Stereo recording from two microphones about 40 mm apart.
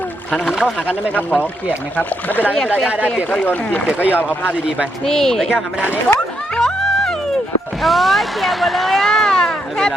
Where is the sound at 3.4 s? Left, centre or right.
Left.